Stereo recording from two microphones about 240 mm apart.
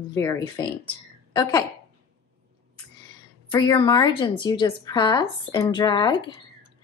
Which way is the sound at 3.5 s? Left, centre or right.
Centre.